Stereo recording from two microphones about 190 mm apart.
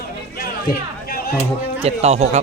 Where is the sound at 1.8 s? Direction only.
35° right (ahead or behind).